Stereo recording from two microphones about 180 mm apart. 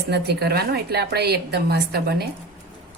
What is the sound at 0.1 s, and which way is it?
A woman's voice, 65° right (ahead or behind).